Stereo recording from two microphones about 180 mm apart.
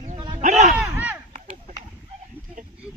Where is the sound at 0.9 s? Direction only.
10° right (ahead or behind).